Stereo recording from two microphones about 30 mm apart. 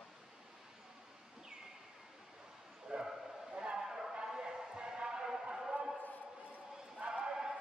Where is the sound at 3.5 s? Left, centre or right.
Right.